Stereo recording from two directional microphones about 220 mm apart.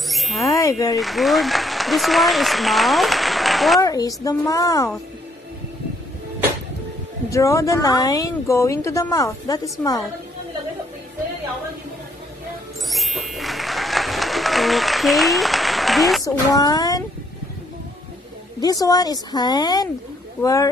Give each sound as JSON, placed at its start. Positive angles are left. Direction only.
{"t": 0.1, "sound": "wind chime", "side_deg": 0}
{"t": 0.5, "sound": "speech", "side_deg": 15}
{"t": 0.9, "sound": "speech", "side_deg": 0}
{"t": 3.8, "sound": "speech", "side_deg": 15}
{"t": 7.2, "sound": "speech", "side_deg": 15}
{"t": 12.9, "sound": "applause", "side_deg": 0}
{"t": 16.5, "sound": "speech", "side_deg": 15}
{"t": 18.6, "sound": "speech", "side_deg": 15}